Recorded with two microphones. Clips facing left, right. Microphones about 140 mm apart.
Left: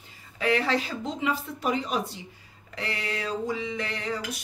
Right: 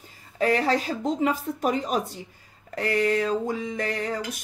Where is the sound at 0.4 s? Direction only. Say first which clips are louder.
Right 3 dB; 40° right (ahead or behind).